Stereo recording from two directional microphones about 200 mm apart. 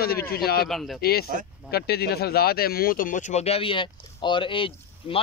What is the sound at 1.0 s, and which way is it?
Speech, 50° left (ahead or behind).